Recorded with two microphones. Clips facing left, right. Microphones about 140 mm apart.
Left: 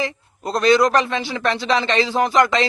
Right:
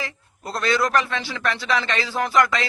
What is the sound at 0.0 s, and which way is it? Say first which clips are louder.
A man's voice: left 8 dB; 20° left (ahead or behind).